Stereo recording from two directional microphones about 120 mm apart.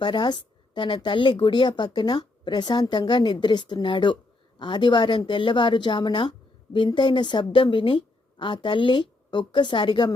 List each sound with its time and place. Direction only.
0.0 s speech: 40° left (ahead or behind)